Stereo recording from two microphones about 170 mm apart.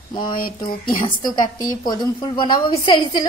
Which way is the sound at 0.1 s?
25° left (ahead or behind).